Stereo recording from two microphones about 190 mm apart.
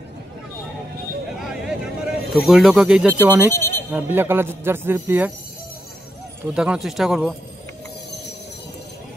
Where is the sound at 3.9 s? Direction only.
10° right (ahead or behind).